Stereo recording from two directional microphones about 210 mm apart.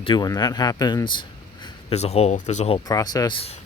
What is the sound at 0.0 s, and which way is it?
Speech, 20° left (ahead or behind).